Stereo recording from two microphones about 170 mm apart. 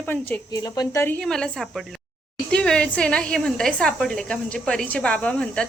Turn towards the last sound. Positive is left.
turn(degrees=5)  # may be behind; listen again after turning